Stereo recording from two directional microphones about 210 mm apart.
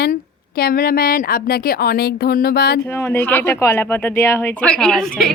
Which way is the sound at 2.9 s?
10° left (ahead or behind).